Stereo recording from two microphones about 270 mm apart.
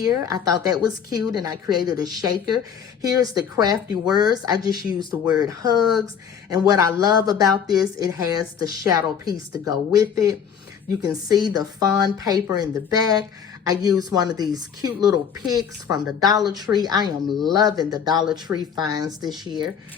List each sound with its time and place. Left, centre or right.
0.0 s a woman's voice: centre